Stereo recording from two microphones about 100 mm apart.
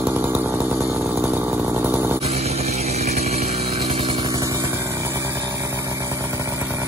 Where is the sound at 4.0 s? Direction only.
50° right (ahead or behind).